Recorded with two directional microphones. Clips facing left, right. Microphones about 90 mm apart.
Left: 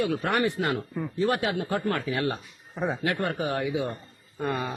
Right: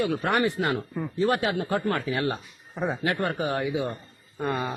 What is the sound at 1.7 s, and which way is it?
Speech, 25° right (ahead or behind).